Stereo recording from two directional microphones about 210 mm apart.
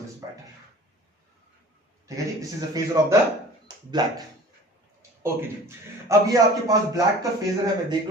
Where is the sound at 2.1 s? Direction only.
15° right (ahead or behind).